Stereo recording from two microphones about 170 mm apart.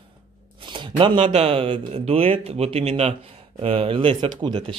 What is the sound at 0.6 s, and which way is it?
Speech, 30° right (ahead or behind).